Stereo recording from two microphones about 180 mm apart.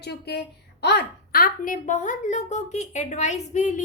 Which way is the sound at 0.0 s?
65° left (ahead or behind).